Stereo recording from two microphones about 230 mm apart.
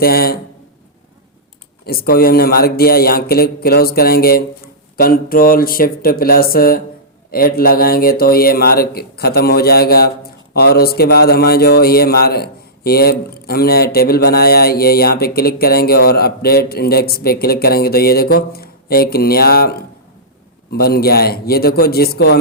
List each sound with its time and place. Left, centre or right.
0.0 s speech: left
1.8 s speech: left